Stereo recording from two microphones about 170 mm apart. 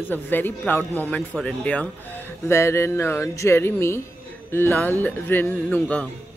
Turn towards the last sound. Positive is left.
turn(degrees=10)  # may be behind; listen again after turning